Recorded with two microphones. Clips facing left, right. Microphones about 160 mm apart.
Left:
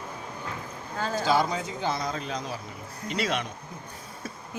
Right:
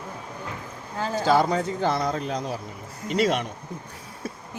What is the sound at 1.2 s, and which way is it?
A man's voice, 60° right (ahead or behind).